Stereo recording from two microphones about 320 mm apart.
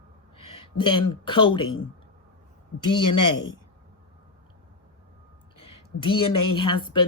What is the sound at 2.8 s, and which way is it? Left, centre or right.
Speech, left.